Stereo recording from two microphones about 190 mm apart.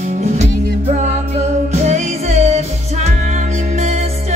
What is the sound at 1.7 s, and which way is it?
Music, 35° right (ahead or behind).